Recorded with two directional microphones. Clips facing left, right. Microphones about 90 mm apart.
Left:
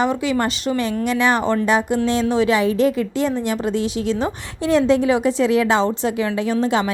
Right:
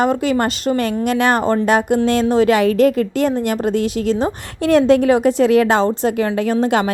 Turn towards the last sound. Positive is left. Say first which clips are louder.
# right 3 dB
turn(degrees=-55)  # may be behind; listen again after turning